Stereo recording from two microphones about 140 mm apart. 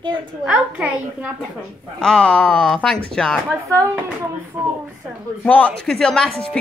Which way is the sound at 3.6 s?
20° right (ahead or behind).